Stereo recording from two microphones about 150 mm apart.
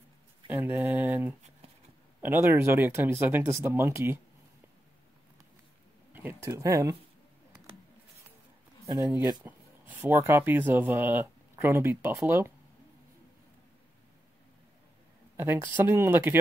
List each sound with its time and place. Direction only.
0.5 s speech: 15° right (ahead or behind)
6.1 s speech: 15° right (ahead or behind)
8.8 s speech: 20° right (ahead or behind)
15.3 s speech: 15° right (ahead or behind)